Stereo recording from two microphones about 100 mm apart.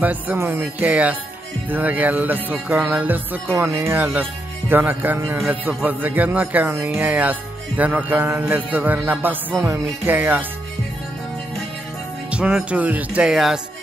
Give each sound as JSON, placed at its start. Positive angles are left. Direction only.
{"t": 0.0, "sound": "music", "side_deg": -15}
{"t": 3.5, "sound": "speech", "side_deg": -30}
{"t": 3.9, "sound": "speech", "side_deg": -15}
{"t": 5.5, "sound": "music", "side_deg": -15}
{"t": 6.7, "sound": "speech", "side_deg": -25}
{"t": 7.0, "sound": "music", "side_deg": -15}
{"t": 12.3, "sound": "music", "side_deg": -10}